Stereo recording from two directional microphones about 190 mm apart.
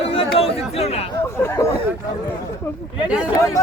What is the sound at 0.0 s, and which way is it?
Chatter, 30° left (ahead or behind).